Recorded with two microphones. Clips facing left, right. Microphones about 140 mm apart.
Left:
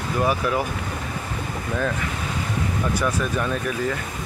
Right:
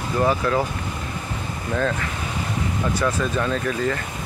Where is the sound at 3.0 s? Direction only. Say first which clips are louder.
Right 3 dB; 10° left (ahead or behind).